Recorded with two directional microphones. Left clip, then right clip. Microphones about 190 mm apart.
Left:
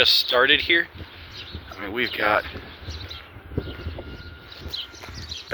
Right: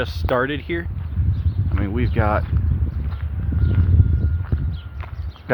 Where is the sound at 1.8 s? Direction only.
Centre (ahead or behind).